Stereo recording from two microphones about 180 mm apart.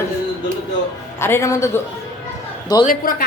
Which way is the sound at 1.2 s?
15° left (ahead or behind).